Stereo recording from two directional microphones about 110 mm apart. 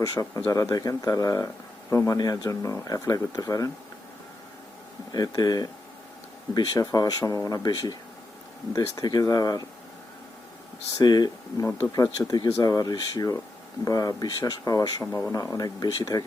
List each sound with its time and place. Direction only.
0.0 s speech: 35° left (ahead or behind)
5.1 s speech: 35° left (ahead or behind)
10.9 s speech: 40° left (ahead or behind)
12.5 s speech: 30° left (ahead or behind)